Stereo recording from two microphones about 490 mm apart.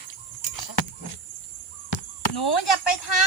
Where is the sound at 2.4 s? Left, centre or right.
Left.